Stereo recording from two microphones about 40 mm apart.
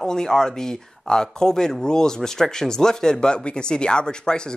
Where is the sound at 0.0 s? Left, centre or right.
Centre.